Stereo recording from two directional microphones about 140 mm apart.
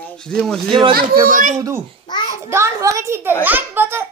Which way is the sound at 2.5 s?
20° right (ahead or behind).